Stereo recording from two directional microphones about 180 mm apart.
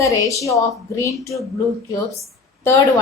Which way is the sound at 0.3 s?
15° left (ahead or behind).